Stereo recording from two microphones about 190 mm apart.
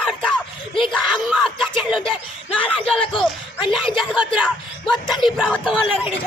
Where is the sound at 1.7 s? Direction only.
25° left (ahead or behind).